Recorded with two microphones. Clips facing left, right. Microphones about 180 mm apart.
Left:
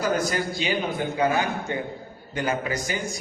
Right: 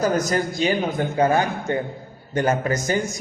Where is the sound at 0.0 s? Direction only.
45° right (ahead or behind).